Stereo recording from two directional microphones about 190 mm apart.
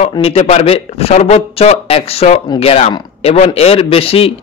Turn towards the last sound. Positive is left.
turn(degrees=30)  # may be behind; listen again after turning